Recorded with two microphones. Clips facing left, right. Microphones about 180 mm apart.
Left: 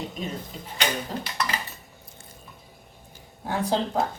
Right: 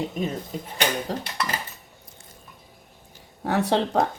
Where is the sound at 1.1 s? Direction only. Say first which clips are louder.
Right 3 dB; 75° right (ahead or behind).